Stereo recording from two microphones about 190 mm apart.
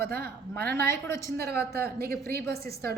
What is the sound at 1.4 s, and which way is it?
A woman's voice, 55° right (ahead or behind).